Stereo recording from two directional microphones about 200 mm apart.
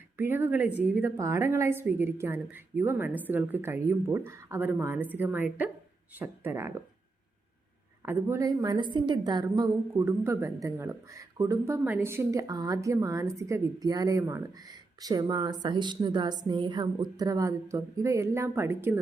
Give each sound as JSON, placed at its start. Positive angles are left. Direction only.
{"t": 0.2, "sound": "a woman's voice", "side_deg": -10}
{"t": 8.0, "sound": "a woman's voice", "side_deg": -10}